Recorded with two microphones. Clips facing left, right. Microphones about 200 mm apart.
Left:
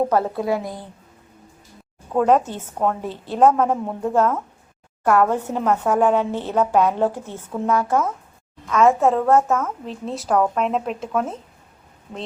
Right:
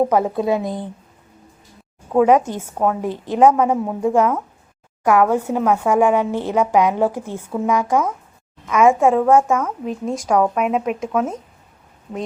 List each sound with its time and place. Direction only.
0.1 s a woman's voice: 15° right (ahead or behind)
2.1 s a woman's voice: 10° right (ahead or behind)